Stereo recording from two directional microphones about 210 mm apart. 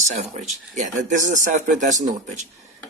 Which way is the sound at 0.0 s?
35° right (ahead or behind).